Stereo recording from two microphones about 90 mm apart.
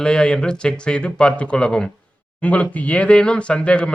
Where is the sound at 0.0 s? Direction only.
10° left (ahead or behind).